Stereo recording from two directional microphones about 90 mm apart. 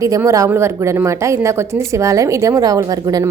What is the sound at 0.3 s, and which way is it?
A woman's voice, 35° right (ahead or behind).